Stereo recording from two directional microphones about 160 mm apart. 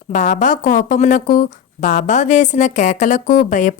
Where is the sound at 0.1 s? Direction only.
50° left (ahead or behind).